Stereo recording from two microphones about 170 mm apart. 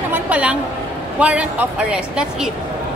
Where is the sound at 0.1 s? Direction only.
10° right (ahead or behind).